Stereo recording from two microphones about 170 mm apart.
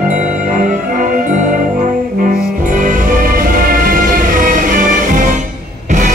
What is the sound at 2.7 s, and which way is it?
Music, 50° right (ahead or behind).